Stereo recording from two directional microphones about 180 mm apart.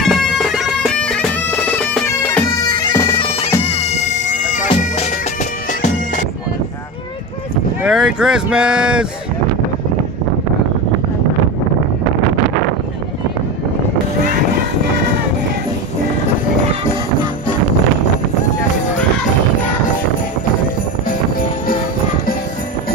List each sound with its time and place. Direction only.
0.0 s bagpipes: centre (ahead or behind)
3.2 s bagpipes: 35° left (ahead or behind)
7.8 s speech: 5° right (ahead or behind)